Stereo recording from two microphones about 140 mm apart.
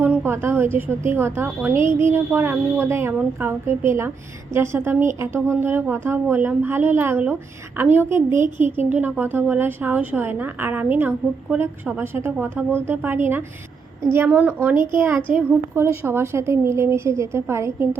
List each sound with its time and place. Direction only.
0.0 s a woman's voice: 15° right (ahead or behind)
14.3 s a woman's voice: 10° right (ahead or behind)